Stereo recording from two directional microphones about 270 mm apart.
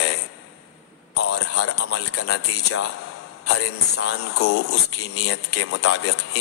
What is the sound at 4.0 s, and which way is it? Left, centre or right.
Speech, left.